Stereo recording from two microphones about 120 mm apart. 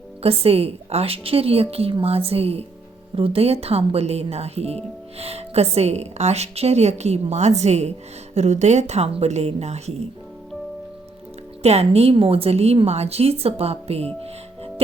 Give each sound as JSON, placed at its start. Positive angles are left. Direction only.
{"t": 0.2, "sound": "speech", "side_deg": -55}
{"t": 11.6, "sound": "speech", "side_deg": -60}